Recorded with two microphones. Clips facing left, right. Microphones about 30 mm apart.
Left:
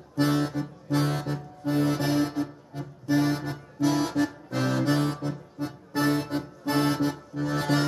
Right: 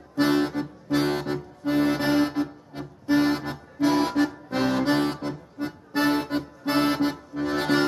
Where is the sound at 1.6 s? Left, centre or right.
Right.